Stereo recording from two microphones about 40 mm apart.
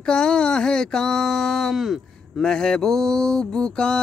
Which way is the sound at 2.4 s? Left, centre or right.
Centre.